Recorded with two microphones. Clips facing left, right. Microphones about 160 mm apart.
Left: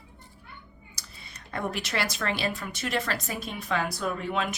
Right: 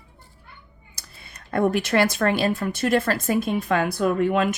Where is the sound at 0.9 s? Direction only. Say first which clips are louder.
Right 3 dB; 55° right (ahead or behind).